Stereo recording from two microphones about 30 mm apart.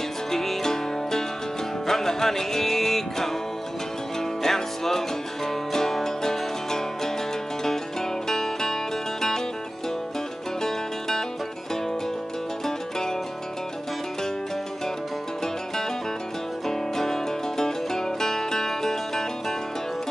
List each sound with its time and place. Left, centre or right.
0.3 s music: centre
10.6 s music: centre
15.4 s music: centre